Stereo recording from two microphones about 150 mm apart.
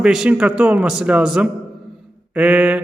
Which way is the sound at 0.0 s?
5° right (ahead or behind).